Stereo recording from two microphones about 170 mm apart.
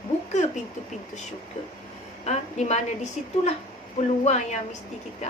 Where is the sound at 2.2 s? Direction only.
40° left (ahead or behind).